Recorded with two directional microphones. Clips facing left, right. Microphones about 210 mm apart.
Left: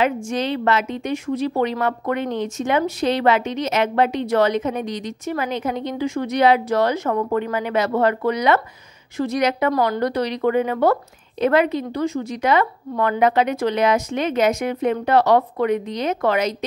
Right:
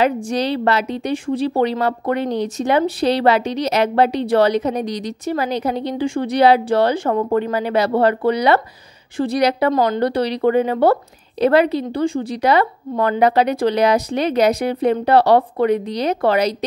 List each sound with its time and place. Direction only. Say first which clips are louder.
0.0 s a woman's voice: right 3 dB; 35° right (ahead or behind)
9.7 s a woman's voice: right 3 dB; 25° right (ahead or behind)